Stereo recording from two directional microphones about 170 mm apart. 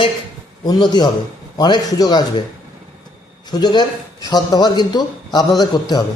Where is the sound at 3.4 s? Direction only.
25° left (ahead or behind).